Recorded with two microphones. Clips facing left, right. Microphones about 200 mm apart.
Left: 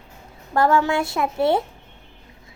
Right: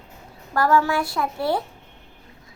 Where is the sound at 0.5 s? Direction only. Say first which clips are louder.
Left 1 dB; 25° left (ahead or behind).